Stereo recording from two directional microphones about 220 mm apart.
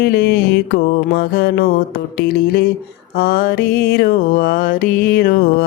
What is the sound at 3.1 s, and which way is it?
Music, 45° left (ahead or behind).